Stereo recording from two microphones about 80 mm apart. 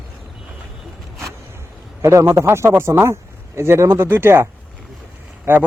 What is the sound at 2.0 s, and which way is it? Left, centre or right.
A man's voice, right.